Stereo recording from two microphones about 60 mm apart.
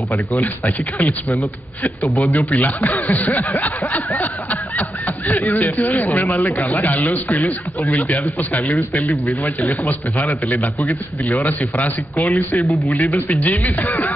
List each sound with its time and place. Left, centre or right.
0.3 s speech: left
2.2 s speech: left